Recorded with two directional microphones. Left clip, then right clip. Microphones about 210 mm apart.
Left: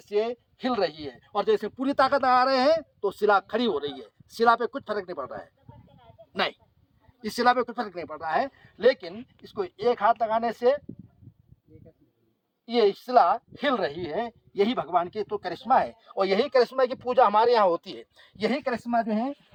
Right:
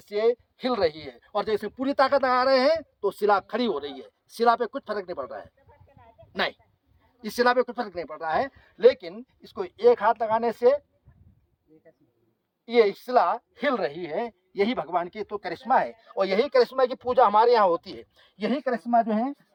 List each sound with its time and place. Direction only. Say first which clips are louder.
0.0 s speech: right 3 dB; 20° right (ahead or behind)
12.6 s speech: right 2 dB; 15° right (ahead or behind); by 19.2 s 15° left (ahead or behind)